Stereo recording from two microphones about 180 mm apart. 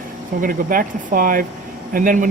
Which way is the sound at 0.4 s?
50° right (ahead or behind).